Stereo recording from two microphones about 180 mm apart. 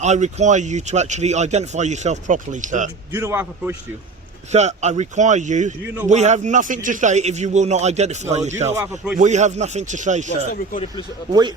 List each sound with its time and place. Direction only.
0.0 s speech: 40° right (ahead or behind)
3.1 s a man's voice: 15° right (ahead or behind)
4.5 s speech: 40° right (ahead or behind)
8.7 s a man's voice: 15° right (ahead or behind)
9.1 s speech: 40° right (ahead or behind)
10.2 s speech: 50° left (ahead or behind)